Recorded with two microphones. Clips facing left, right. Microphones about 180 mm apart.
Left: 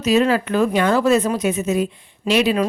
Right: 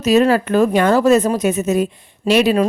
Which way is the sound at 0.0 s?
45° right (ahead or behind).